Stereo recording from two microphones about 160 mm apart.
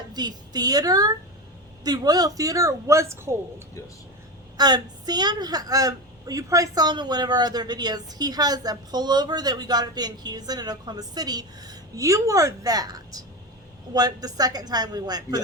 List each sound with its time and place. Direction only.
0.1 s a woman's voice: 25° right (ahead or behind)
4.5 s a woman's voice: 25° right (ahead or behind)